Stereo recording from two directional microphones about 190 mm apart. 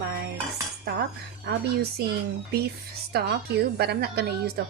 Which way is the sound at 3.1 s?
60° right (ahead or behind).